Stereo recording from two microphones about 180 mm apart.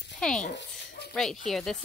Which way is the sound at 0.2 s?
5° left (ahead or behind).